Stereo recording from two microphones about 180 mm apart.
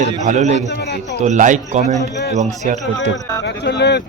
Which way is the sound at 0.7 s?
70° left (ahead or behind).